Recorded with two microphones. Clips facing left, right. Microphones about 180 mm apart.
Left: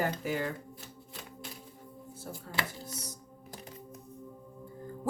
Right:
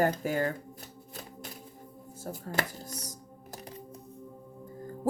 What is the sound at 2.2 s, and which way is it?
Speech, 45° right (ahead or behind).